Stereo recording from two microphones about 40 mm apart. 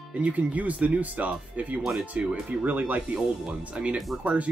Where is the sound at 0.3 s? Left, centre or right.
Right.